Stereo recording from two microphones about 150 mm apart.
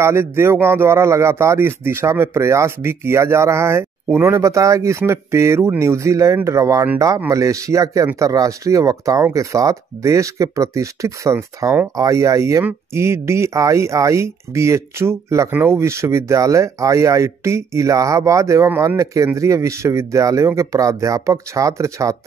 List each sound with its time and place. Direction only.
0.0 s speech: 15° right (ahead or behind)